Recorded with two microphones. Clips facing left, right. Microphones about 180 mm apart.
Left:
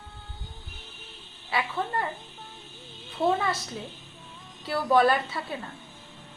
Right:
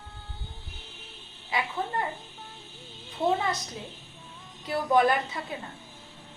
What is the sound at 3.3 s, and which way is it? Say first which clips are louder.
Speech: left 1 dB; 20° right (ahead or behind).